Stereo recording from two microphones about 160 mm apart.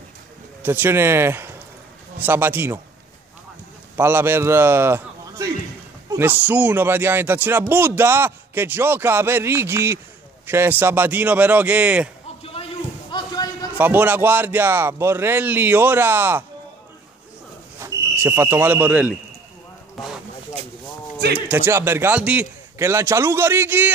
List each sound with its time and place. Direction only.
0.6 s speech: 10° right (ahead or behind)
3.9 s a man's voice: 15° right (ahead or behind)
12.5 s a sound: 30° left (ahead or behind)
13.7 s speech: 10° right (ahead or behind)
17.7 s speech: 15° right (ahead or behind)
20.0 s speech: centre (ahead or behind)
21.4 s speech: 10° right (ahead or behind)